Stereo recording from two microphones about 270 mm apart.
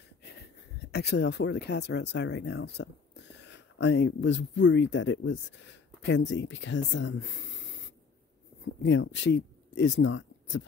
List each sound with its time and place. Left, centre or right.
0.2 s speech: left
8.8 s speech: left